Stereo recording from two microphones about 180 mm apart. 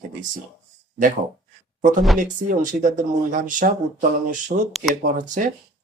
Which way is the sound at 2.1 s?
45° right (ahead or behind).